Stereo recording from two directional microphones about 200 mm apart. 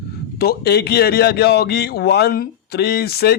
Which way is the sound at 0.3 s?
55° left (ahead or behind).